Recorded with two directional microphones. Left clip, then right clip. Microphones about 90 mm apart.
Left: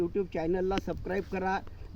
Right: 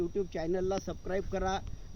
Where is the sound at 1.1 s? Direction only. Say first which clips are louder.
Even; 35° right (ahead or behind).